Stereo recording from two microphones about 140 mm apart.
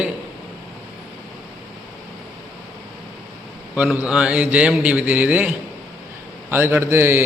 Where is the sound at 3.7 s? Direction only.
10° right (ahead or behind).